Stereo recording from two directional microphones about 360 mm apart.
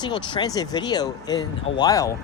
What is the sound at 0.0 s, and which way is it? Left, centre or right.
Speech, centre.